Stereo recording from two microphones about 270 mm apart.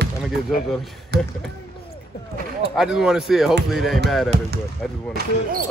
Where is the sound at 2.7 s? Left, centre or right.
Centre.